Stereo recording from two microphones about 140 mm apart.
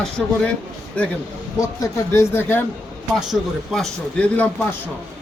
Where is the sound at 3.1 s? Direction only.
Centre (ahead or behind).